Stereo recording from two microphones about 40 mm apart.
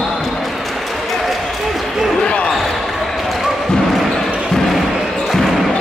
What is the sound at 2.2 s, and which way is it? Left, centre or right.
Basketball bounce, left.